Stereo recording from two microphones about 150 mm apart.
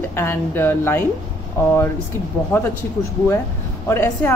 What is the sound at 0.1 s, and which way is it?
Speech, 15° left (ahead or behind).